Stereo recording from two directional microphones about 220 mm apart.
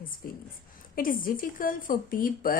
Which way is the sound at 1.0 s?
40° left (ahead or behind).